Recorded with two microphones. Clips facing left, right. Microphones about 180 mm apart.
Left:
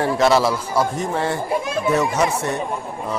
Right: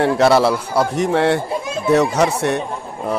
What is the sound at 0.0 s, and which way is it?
A man's voice, 65° right (ahead or behind).